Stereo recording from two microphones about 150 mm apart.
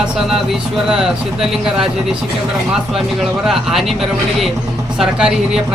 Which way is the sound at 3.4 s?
Centre (ahead or behind).